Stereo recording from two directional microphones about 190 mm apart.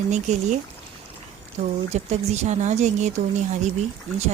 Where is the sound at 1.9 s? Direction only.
35° right (ahead or behind).